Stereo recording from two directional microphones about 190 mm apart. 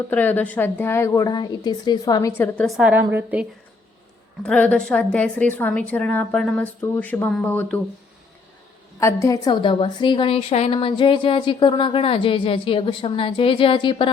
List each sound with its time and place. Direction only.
0.1 s a woman's voice: 10° left (ahead or behind)
2.6 s a woman's voice: centre (ahead or behind)
4.4 s a woman's voice: 5° left (ahead or behind)
9.0 s a woman's voice: 15° left (ahead or behind)